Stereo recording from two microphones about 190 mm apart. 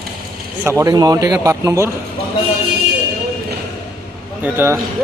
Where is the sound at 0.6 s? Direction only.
15° right (ahead or behind).